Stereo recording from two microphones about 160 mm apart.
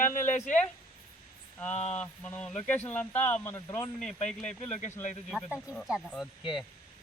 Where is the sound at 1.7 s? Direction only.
45° left (ahead or behind).